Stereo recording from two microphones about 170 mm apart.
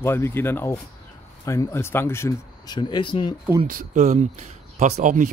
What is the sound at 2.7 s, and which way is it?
Speech, 25° left (ahead or behind).